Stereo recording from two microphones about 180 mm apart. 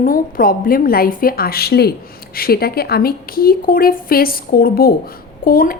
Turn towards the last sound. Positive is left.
turn(degrees=55)  # may be behind; listen again after turning